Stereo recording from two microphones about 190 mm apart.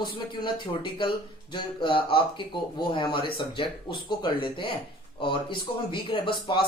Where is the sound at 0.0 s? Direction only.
25° left (ahead or behind).